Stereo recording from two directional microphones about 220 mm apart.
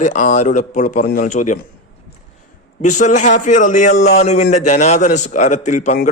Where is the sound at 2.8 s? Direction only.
35° left (ahead or behind).